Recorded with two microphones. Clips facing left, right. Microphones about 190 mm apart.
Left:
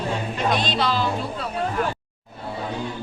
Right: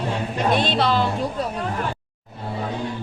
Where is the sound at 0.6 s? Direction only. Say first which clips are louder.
Right 3 dB; 55° right (ahead or behind).